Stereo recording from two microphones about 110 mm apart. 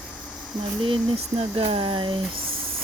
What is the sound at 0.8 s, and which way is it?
Speech, 60° right (ahead or behind).